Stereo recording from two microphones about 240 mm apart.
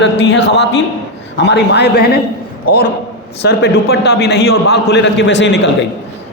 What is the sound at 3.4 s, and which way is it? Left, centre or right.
A man's voice, left.